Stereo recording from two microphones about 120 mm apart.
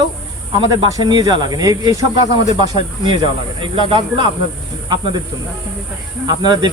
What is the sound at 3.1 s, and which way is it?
Speech, 45° right (ahead or behind).